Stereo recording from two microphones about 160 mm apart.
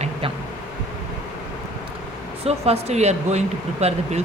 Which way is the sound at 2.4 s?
40° right (ahead or behind).